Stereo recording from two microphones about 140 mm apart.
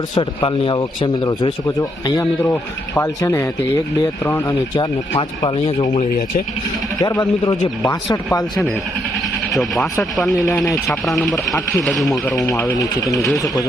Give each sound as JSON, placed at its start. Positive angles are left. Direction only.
{"t": 0.1, "sound": "speech", "side_deg": 40}
{"t": 1.6, "sound": "speech", "side_deg": 20}
{"t": 4.7, "sound": "speech", "side_deg": 30}
{"t": 7.0, "sound": "speech", "side_deg": 30}
{"t": 7.8, "sound": "speech", "side_deg": 20}
{"t": 9.5, "sound": "speech", "side_deg": 0}
{"t": 12.4, "sound": "speech", "side_deg": 25}